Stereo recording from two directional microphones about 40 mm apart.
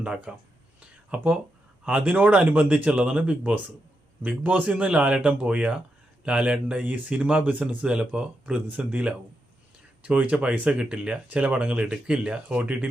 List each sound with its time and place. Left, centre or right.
0.0 s speech: right
1.1 s speech: right
4.2 s speech: right
6.8 s speech: right
7.1 s speech: right
7.9 s speech: right
10.7 s speech: right